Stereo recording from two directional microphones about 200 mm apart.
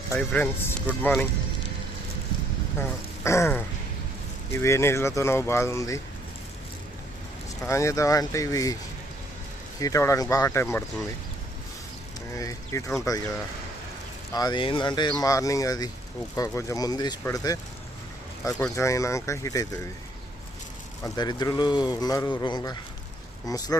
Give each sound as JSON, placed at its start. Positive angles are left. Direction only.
{"t": 0.1, "sound": "speech", "side_deg": 10}
{"t": 3.2, "sound": "speech", "side_deg": 15}
{"t": 7.7, "sound": "speech", "side_deg": 15}
{"t": 9.8, "sound": "speech", "side_deg": 15}
{"t": 12.3, "sound": "speech", "side_deg": 15}
{"t": 14.3, "sound": "speech", "side_deg": 20}
{"t": 21.0, "sound": "speech", "side_deg": 20}